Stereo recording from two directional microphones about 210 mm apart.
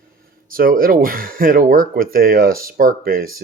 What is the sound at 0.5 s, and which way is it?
Speech, 45° right (ahead or behind).